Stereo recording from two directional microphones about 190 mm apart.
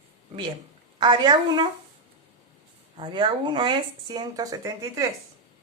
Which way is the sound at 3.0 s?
25° right (ahead or behind).